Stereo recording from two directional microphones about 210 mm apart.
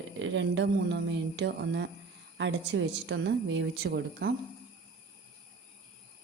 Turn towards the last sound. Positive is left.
turn(degrees=-50)  # may be behind; listen again after turning